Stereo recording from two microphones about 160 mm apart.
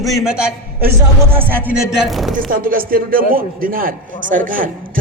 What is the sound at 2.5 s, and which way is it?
A man's voice, 60° right (ahead or behind).